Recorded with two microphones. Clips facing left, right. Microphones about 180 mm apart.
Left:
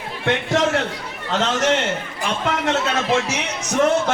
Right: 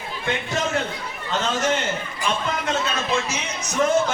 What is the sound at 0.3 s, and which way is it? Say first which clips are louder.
A man's voice: left 6 dB; 75° left (ahead or behind).